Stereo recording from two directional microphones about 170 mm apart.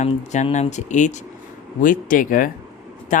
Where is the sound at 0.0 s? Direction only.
45° left (ahead or behind).